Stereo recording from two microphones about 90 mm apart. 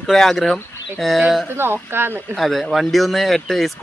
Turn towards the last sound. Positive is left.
turn(degrees=5)  # may be behind; listen again after turning